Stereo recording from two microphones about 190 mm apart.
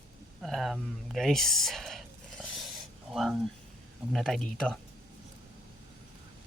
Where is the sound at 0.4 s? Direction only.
Centre (ahead or behind).